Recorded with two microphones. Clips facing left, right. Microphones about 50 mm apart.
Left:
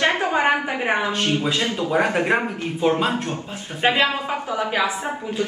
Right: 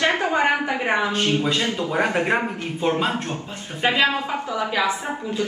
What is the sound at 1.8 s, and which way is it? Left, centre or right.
A man's voice, centre.